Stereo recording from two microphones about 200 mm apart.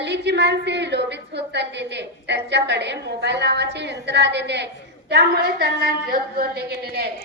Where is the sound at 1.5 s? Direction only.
60° right (ahead or behind).